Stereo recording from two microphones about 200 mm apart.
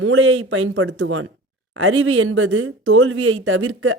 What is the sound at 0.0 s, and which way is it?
Speech, 85° right.